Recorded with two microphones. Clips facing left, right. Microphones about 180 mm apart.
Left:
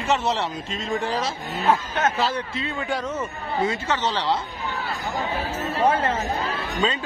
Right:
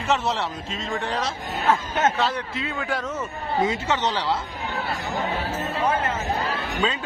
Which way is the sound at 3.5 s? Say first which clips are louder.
Right 1 dB; 20° right (ahead or behind).